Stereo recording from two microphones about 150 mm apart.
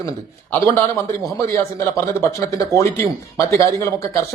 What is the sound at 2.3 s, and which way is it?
Speech, 20° left (ahead or behind).